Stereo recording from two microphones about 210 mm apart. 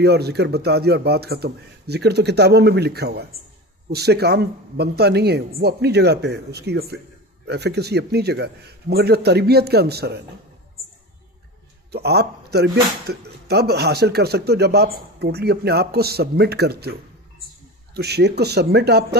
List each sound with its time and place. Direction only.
0.0 s speech: 50° right (ahead or behind)
11.9 s speech: 50° right (ahead or behind)